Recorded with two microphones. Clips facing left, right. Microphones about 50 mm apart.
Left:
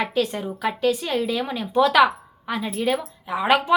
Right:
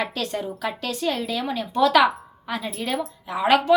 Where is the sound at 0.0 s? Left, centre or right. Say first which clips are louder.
Left 3 dB; centre.